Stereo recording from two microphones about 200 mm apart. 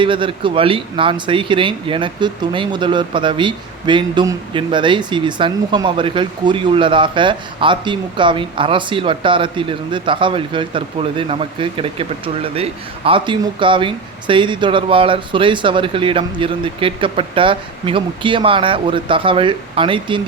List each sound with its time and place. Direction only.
0.0 s speech: 25° right (ahead or behind)